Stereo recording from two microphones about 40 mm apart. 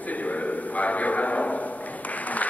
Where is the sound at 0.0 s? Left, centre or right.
Left.